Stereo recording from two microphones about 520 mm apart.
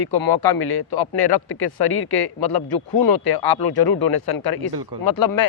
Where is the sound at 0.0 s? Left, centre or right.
Left.